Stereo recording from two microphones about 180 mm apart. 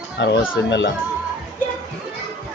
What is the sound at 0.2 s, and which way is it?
Speech, 75° left (ahead or behind).